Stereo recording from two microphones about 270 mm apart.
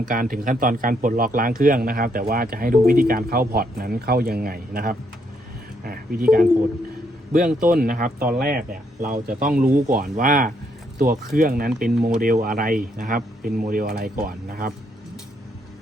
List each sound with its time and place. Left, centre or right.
0.0 s speech: right
7.3 s speech: right